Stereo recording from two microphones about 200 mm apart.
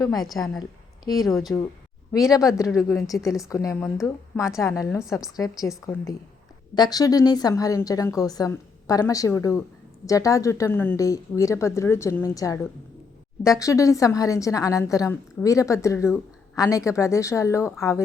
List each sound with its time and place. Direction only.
0.2 s a woman's voice: centre (ahead or behind)
1.0 s a woman's voice: 15° left (ahead or behind)
6.7 s a woman's voice: 20° left (ahead or behind)
13.6 s a woman's voice: 15° left (ahead or behind)